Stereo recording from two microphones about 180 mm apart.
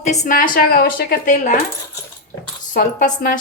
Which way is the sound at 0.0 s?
40° left (ahead or behind).